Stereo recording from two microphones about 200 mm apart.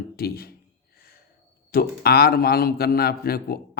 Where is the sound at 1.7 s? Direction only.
50° left (ahead or behind).